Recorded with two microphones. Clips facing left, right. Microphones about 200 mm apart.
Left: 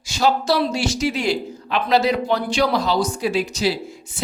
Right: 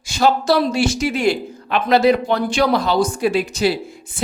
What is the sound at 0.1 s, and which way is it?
Speech, 50° right (ahead or behind).